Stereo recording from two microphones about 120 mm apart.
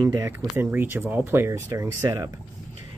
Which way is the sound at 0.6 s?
20° right (ahead or behind).